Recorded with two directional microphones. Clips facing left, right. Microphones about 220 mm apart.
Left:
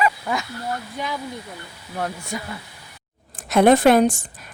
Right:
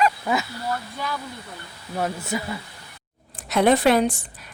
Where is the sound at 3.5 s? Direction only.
50° left (ahead or behind).